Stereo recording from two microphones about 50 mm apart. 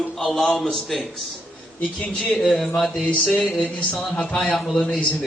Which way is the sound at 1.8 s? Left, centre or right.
Left.